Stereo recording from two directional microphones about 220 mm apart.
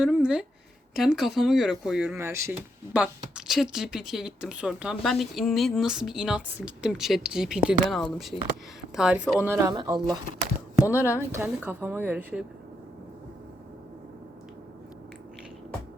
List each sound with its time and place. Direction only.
0.0 s speech: 5° right (ahead or behind)